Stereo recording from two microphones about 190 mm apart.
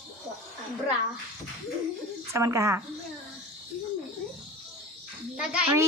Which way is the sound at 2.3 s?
15° right (ahead or behind).